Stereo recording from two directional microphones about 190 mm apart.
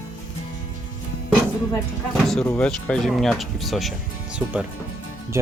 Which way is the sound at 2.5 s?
5° left (ahead or behind).